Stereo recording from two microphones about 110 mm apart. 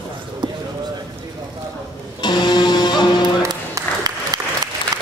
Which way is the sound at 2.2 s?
40° left (ahead or behind).